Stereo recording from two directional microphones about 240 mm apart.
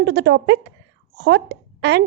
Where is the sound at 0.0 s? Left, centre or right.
Right.